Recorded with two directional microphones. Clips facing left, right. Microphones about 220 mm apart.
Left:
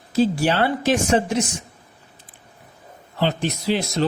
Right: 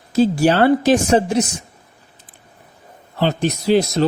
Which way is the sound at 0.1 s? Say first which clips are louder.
Right 4 dB; 45° right (ahead or behind).